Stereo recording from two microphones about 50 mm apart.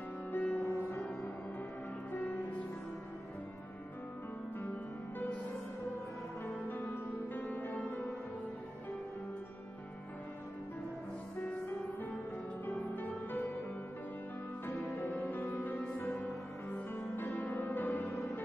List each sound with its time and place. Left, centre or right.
0.3 s music: left
2.1 s music: left
6.4 s music: left
12.6 s music: left
14.7 s music: left
15.0 s music: left